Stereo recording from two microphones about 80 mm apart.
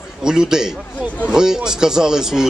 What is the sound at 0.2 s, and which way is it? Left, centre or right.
Speech, centre.